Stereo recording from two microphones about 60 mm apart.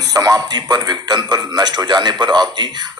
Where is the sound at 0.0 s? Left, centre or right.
Right.